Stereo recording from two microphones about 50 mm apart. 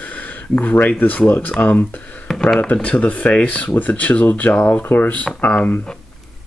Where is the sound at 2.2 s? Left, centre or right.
Centre.